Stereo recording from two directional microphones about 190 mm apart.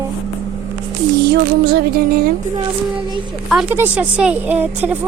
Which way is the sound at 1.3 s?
60° right (ahead or behind).